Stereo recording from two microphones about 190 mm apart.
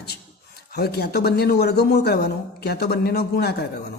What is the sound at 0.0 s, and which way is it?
A man's voice, 55° left (ahead or behind).